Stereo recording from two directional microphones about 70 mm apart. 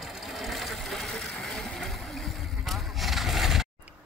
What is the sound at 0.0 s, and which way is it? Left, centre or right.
Sewing machine, centre.